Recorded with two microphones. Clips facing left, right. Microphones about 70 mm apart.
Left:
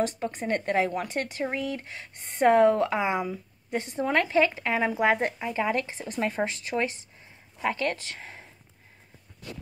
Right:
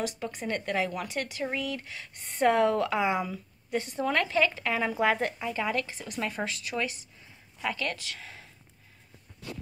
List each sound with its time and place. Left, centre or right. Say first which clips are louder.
0.0 s speech: left 5 dB; left